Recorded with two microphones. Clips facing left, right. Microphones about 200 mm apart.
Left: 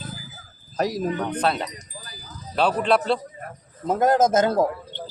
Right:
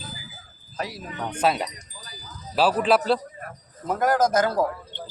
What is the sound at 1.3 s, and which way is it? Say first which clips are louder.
Speech: even; 10° right (ahead or behind).